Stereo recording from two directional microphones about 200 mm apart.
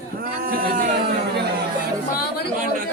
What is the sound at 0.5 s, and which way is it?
Speech, 45° right (ahead or behind).